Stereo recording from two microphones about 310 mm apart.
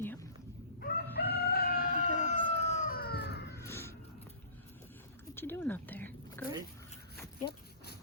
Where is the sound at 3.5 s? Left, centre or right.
Centre.